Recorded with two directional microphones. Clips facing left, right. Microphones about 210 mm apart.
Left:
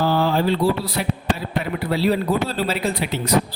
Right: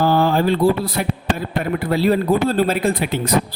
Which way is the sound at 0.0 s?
50° right (ahead or behind).